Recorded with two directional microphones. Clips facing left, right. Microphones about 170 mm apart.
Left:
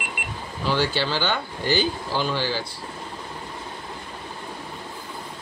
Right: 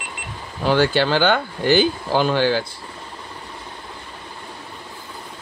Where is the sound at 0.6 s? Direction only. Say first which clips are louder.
Right 6 dB; 55° right (ahead or behind).